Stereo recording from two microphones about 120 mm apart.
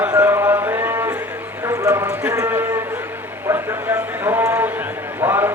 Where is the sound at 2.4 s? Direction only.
15° right (ahead or behind).